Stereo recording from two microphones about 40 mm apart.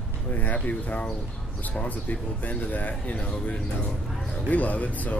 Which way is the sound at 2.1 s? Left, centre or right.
Left.